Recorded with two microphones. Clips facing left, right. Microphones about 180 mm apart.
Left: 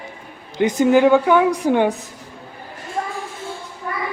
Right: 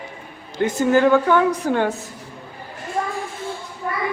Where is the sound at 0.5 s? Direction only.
15° left (ahead or behind).